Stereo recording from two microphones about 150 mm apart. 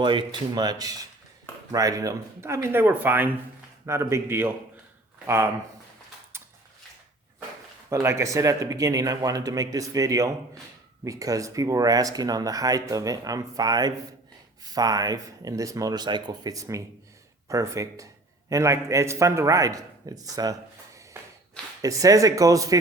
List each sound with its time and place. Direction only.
0.0 s speech: 30° right (ahead or behind); by 5.5 s 15° right (ahead or behind)
6.3 s a sound: 15° right (ahead or behind)
7.9 s a man's voice: 20° right (ahead or behind)